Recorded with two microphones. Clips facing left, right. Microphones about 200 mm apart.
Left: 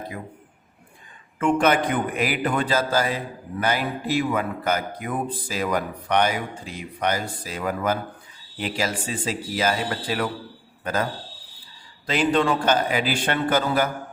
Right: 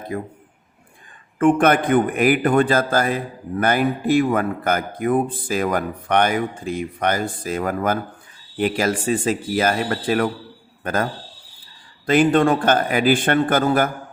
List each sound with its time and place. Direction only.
0.1 s a man's voice: 45° right (ahead or behind)
1.4 s a man's voice: 55° right (ahead or behind)